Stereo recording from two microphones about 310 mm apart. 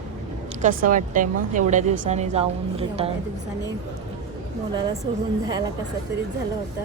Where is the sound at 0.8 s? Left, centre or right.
Right.